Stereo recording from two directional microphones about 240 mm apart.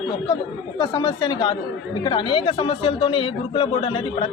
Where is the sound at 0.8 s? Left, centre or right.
Centre.